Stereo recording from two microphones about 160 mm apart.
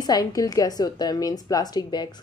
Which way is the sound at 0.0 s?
25° left (ahead or behind).